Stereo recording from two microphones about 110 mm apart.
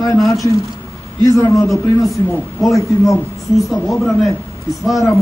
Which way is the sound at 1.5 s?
30° left (ahead or behind).